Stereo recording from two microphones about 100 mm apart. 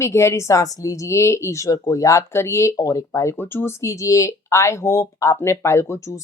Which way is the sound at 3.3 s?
20° left (ahead or behind).